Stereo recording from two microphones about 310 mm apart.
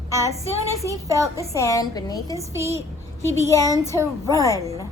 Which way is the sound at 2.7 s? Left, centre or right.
Centre.